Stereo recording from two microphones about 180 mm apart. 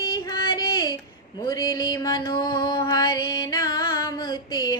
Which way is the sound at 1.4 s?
20° left (ahead or behind).